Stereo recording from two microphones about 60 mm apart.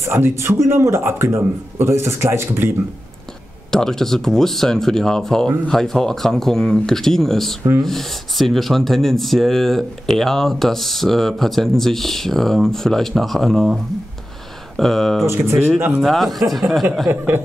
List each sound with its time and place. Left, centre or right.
0.0 s speech: right
3.7 s speech: centre
14.8 s speech: centre
15.2 s speech: right
16.0 s speech: centre
17.1 s speech: right